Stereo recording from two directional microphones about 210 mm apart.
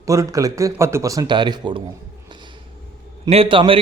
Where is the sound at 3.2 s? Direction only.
25° right (ahead or behind).